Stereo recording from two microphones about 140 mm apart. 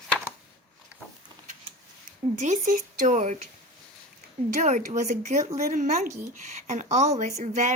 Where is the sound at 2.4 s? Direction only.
60° right (ahead or behind).